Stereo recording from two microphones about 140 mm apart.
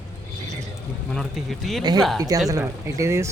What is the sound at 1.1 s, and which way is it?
Speech, centre (ahead or behind).